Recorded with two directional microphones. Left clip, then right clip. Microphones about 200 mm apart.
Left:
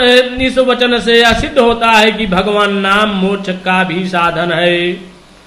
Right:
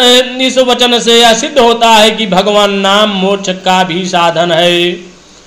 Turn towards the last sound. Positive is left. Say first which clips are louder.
# right 4 dB
turn(degrees=-20)  # may be behind; listen again after turning